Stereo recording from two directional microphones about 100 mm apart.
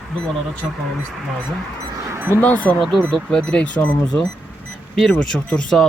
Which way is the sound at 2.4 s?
15° left (ahead or behind).